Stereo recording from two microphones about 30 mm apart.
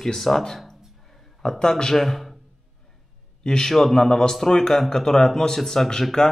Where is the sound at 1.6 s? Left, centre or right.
Centre.